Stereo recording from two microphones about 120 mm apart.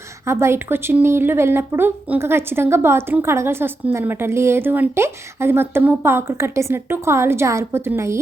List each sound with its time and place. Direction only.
0.3 s speech: 20° right (ahead or behind)